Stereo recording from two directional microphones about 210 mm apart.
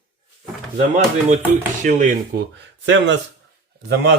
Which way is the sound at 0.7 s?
35° right (ahead or behind).